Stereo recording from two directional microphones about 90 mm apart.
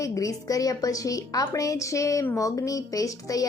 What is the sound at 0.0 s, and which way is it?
A woman's voice, 40° left (ahead or behind).